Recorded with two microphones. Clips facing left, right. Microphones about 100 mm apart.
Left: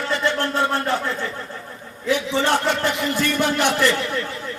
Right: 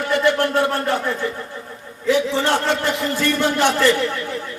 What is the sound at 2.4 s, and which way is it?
Speech, 15° left (ahead or behind).